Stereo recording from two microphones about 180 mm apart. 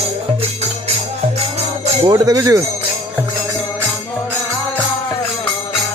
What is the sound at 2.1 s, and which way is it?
Speech, 20° right (ahead or behind).